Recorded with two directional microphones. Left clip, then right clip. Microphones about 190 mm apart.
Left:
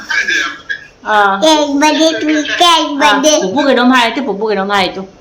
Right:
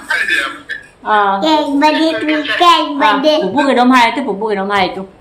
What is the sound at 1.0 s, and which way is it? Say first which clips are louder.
Speech: left 3 dB; 10° left (ahead or behind).